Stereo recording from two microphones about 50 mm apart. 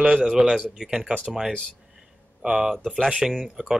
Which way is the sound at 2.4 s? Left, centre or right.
Right.